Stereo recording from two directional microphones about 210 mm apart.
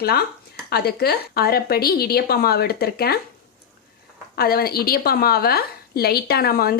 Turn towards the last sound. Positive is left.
turn(degrees=50)  # may be behind; listen again after turning